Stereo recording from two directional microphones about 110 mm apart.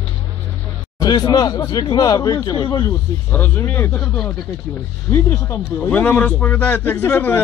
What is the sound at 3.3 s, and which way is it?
Speech, 20° left (ahead or behind).